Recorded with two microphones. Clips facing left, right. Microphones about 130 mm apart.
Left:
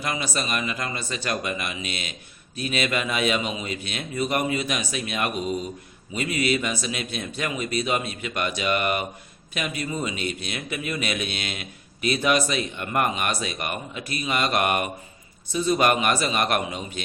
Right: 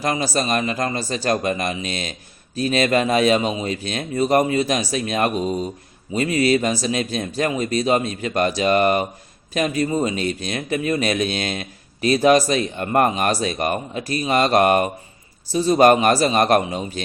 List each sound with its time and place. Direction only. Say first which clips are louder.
0.0 s speech: right 7 dB; 40° right (ahead or behind)